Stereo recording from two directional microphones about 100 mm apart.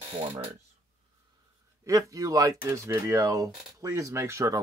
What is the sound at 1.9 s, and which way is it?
Speech, 35° right (ahead or behind).